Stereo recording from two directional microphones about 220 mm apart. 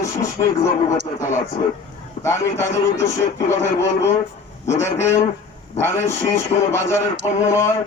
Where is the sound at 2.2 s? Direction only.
10° left (ahead or behind).